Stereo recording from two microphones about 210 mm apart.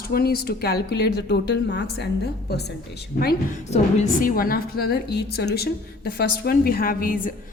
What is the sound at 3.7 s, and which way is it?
A woman's voice, 35° left (ahead or behind).